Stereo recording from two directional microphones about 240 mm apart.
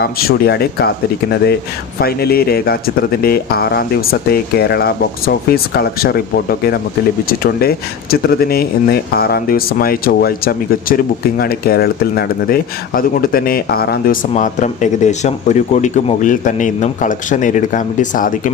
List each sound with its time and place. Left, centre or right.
0.0 s speech: left